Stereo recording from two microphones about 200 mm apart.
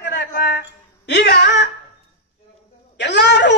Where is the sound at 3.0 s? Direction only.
60° left (ahead or behind).